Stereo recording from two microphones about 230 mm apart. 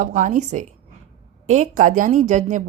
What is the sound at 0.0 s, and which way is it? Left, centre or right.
Speech, right.